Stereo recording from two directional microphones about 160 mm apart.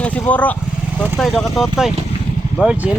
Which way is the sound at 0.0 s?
10° left (ahead or behind).